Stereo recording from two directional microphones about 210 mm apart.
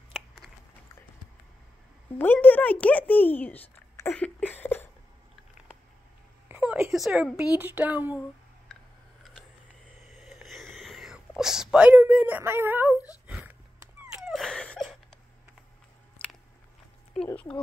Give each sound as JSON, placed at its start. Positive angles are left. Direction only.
{"t": 2.1, "sound": "speech", "side_deg": 10}
{"t": 6.5, "sound": "a sound", "side_deg": -10}
{"t": 7.2, "sound": "speech", "side_deg": -5}
{"t": 10.2, "sound": "whispering", "side_deg": 0}
{"t": 12.9, "sound": "speech", "side_deg": 15}
{"t": 13.3, "sound": "a sound", "side_deg": -5}
{"t": 16.2, "sound": "biting", "side_deg": 5}
{"t": 17.3, "sound": "speech", "side_deg": 5}